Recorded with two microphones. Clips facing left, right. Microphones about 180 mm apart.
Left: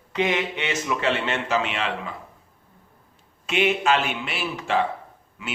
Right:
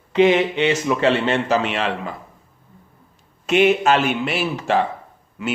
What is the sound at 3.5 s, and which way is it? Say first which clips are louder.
A man's voice: right 6 dB; 45° right (ahead or behind).